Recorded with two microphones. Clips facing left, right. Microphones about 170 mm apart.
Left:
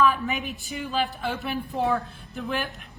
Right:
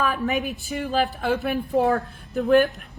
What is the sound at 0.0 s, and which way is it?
Speech, 40° right (ahead or behind).